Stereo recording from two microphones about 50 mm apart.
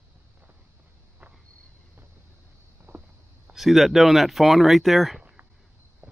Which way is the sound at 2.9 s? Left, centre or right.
Right.